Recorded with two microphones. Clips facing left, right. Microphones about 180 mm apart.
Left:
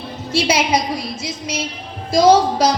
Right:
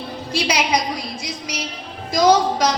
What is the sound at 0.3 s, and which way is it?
A woman's voice, 25° left (ahead or behind).